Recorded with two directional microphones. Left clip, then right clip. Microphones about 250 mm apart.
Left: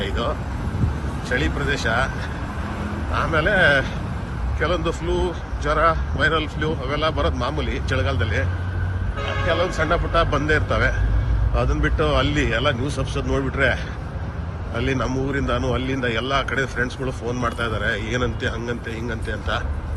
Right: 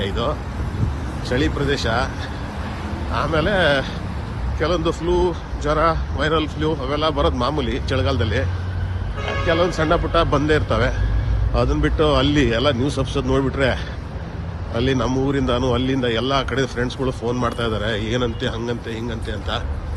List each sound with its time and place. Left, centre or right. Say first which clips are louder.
0.0 s wind: right 2 dB; centre
1.3 s speech: right 2 dB; centre
3.2 s speech: left 1 dB; centre
9.7 s speech: right 2 dB; centre
14.8 s speech: right 3 dB; centre